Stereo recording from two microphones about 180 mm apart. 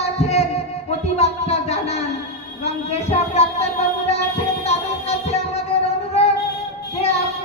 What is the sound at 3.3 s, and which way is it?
Music, 35° left (ahead or behind).